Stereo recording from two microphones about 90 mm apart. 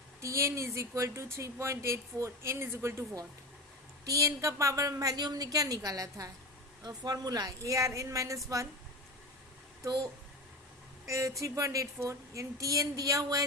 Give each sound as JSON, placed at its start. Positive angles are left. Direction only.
{"t": 0.2, "sound": "speech", "side_deg": -35}
{"t": 4.0, "sound": "a woman's voice", "side_deg": -40}
{"t": 9.8, "sound": "speech", "side_deg": -40}